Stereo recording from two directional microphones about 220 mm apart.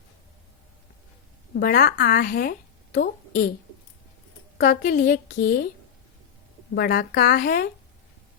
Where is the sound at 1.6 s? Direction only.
40° left (ahead or behind).